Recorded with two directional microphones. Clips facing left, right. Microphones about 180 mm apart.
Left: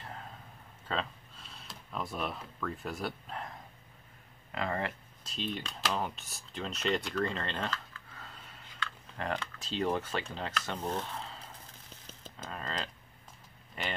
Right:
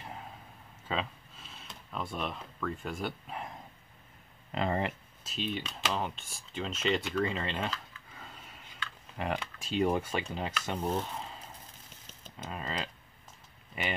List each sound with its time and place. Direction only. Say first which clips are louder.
0.0 s a sound: right 1 dB; 10° right (ahead or behind)
0.8 s speech: right 1 dB; 5° right (ahead or behind)
4.5 s speech: right 3 dB; 20° right (ahead or behind)
5.2 s speech: right 2 dB; 5° right (ahead or behind)
12.4 s speech: right 2 dB; 10° right (ahead or behind)